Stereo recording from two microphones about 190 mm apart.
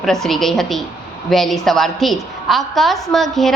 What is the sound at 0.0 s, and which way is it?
Speech, centre (ahead or behind).